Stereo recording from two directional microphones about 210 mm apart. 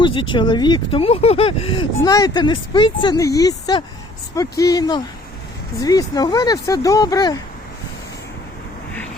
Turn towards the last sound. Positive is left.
turn(degrees=20)  # may be behind; listen again after turning